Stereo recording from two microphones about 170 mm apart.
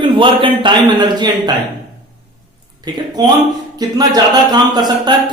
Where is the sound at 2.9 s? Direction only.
25° right (ahead or behind).